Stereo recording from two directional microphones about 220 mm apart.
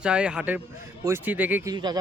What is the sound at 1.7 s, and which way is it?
Speech, 20° right (ahead or behind).